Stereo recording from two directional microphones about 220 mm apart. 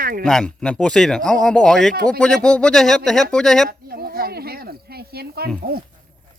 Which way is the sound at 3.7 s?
45° right (ahead or behind).